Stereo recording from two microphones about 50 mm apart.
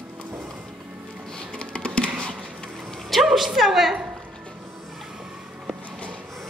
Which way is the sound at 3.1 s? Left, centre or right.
Centre.